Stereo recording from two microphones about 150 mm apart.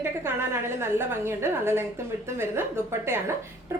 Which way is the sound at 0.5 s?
15° right (ahead or behind).